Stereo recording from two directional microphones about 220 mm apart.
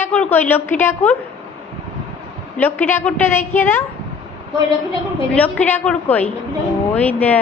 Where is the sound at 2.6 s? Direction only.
10° left (ahead or behind).